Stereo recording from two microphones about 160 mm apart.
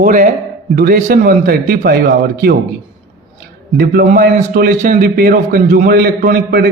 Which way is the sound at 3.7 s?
80° right.